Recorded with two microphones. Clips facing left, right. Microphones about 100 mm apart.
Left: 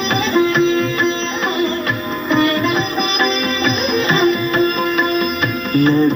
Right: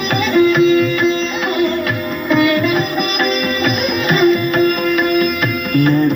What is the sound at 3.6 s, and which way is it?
Sitar, 25° left (ahead or behind).